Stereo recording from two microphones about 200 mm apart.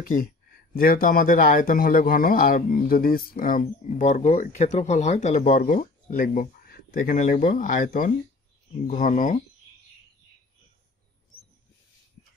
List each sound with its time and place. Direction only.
0.0 s speech: 45° left (ahead or behind)